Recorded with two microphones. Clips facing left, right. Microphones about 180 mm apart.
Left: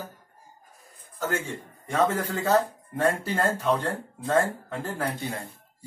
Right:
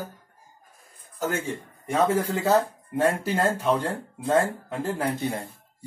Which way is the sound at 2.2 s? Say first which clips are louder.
Right 1 dB; 10° right (ahead or behind).